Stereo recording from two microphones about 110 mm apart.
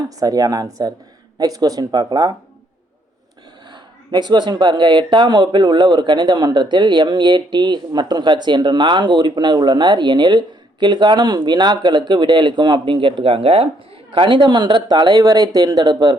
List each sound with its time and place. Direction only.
0.2 s speech: 35° right (ahead or behind)
3.7 s speech: 40° right (ahead or behind)